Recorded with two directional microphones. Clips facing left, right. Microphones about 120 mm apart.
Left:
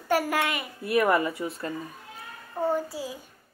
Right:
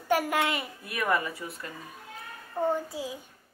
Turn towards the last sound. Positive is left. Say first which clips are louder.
# left 1 dB
turn(degrees=-20)  # may be behind; listen again after turning